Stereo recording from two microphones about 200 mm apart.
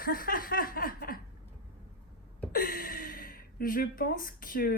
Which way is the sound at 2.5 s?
45° left (ahead or behind).